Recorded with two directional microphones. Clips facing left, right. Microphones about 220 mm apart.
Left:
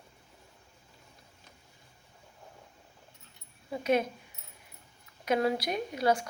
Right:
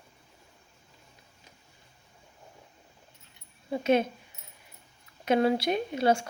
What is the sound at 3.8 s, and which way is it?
Speech, 25° right (ahead or behind).